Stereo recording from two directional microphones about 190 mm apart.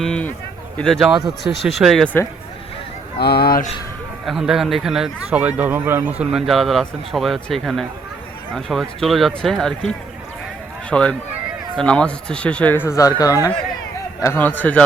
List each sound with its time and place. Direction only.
0.0 s a sound: 5° left (ahead or behind)
0.8 s a man's voice: centre (ahead or behind)
3.2 s speech: 55° left (ahead or behind)
4.3 s a man's voice: centre (ahead or behind)